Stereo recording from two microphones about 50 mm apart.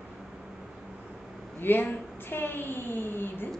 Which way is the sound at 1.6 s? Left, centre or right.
Left.